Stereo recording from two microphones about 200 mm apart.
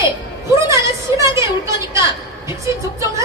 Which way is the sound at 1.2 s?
15° right (ahead or behind).